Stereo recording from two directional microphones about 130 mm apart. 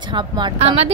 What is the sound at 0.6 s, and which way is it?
Speech, 50° right (ahead or behind).